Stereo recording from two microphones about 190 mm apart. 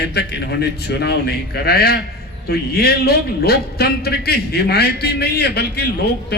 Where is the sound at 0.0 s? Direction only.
60° left (ahead or behind).